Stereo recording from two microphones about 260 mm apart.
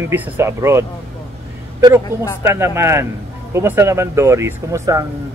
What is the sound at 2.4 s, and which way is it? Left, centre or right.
Speech, centre.